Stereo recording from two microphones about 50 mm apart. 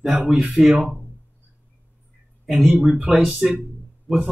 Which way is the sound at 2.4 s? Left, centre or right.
Centre.